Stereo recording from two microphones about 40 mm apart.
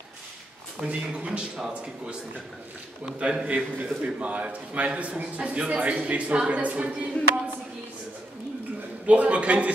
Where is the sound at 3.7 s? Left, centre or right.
Right.